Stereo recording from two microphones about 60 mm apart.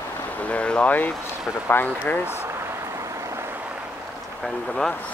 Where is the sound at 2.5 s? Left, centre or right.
Right.